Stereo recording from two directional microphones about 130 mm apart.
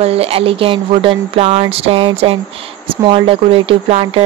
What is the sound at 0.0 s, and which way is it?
Speech, 50° right (ahead or behind).